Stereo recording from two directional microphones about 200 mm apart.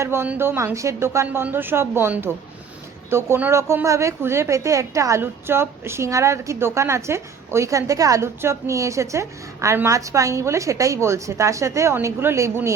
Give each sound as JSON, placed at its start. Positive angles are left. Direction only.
{"t": 0.0, "sound": "a woman's voice", "side_deg": -10}